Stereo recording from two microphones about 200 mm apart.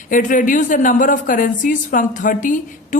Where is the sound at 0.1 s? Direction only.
40° left (ahead or behind).